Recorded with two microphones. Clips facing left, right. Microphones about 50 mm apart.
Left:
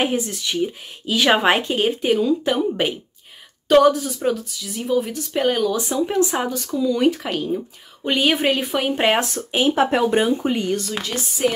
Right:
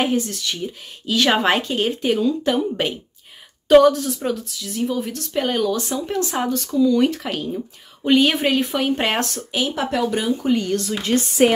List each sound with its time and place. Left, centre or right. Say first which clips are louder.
0.0 s speech: right 1 dB; centre
9.5 s speech: left 6 dB; left
11.0 s speech: right 6 dB; right